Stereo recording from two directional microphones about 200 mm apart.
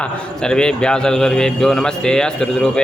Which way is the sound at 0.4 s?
5° left (ahead or behind).